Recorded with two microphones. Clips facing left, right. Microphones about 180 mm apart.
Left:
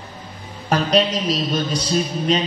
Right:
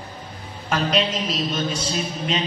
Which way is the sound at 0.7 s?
40° left (ahead or behind).